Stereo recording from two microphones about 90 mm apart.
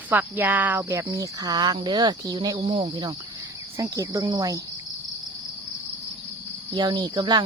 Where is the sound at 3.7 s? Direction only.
35° right (ahead or behind).